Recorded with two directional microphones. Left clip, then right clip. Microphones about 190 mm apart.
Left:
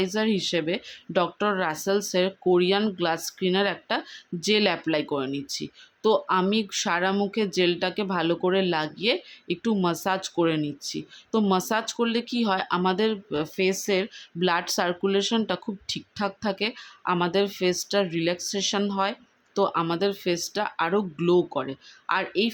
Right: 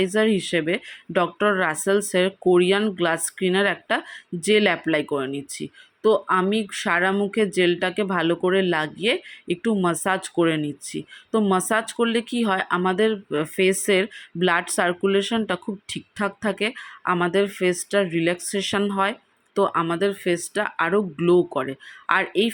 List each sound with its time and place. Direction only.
0.0 s speech: 10° right (ahead or behind)